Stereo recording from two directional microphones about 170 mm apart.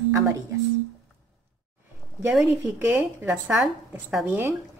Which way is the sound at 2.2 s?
10° right (ahead or behind).